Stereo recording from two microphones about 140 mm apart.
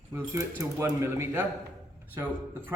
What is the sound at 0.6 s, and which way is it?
Speech, 20° right (ahead or behind).